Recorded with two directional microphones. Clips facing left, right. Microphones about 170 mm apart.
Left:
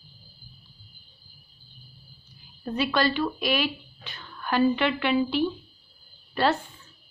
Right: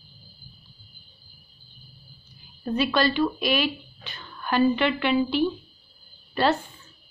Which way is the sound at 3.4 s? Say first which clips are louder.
Right 2 dB; 10° left (ahead or behind).